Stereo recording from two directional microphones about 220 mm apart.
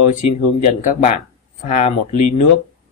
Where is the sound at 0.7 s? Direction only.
30° left (ahead or behind).